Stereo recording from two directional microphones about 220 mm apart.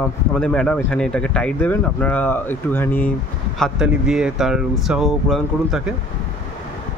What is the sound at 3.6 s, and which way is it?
Speech, 5° right (ahead or behind).